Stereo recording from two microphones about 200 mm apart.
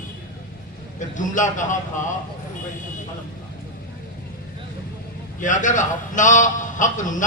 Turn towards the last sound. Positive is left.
turn(degrees=40)  # may be behind; listen again after turning